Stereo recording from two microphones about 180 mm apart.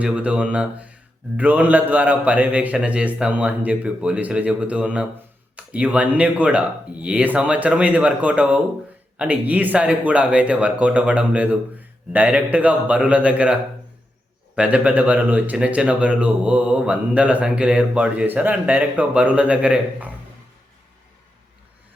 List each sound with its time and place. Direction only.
0.0 s speech: 10° right (ahead or behind)